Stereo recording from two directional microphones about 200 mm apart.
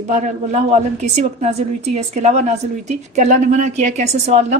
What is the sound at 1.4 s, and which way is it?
A woman's voice, 35° right (ahead or behind).